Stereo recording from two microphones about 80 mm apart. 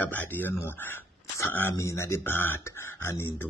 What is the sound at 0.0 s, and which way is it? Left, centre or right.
Speech, left.